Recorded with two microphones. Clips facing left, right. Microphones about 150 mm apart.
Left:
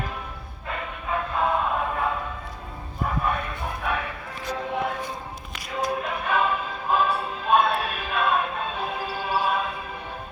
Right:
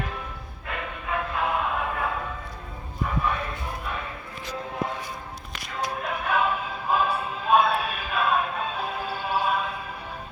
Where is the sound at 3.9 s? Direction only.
70° left (ahead or behind).